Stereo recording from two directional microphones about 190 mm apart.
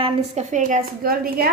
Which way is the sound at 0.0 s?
35° right (ahead or behind).